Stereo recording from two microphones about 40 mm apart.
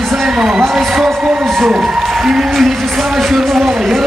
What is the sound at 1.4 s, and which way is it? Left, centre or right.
Music, centre.